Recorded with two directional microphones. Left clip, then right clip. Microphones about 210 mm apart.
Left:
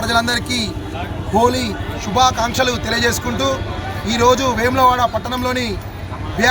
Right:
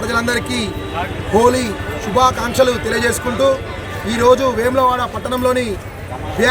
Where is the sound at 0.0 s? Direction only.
25° left (ahead or behind).